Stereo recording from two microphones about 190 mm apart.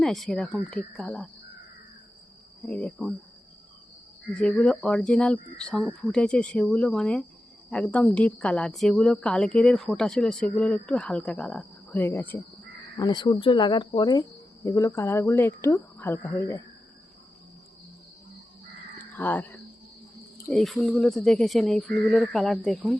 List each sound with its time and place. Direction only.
0.0 s a woman's voice: centre (ahead or behind)
2.6 s a woman's voice: 5° left (ahead or behind)
4.4 s a woman's voice: 5° left (ahead or behind)
13.0 s speech: 25° left (ahead or behind)
18.9 s a sound: 10° left (ahead or behind)
20.5 s a woman's voice: centre (ahead or behind)